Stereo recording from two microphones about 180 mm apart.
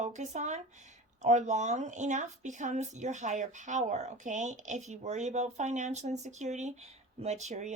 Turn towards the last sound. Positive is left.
turn(degrees=-40)  # may be behind; listen again after turning